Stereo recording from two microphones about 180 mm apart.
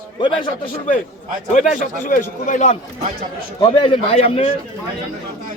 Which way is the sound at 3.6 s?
30° left (ahead or behind).